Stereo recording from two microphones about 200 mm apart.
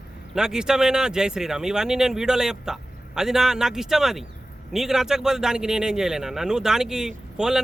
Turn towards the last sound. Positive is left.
turn(degrees=-5)  # may be behind; listen again after turning